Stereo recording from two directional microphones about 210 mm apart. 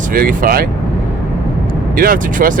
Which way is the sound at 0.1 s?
45° right (ahead or behind).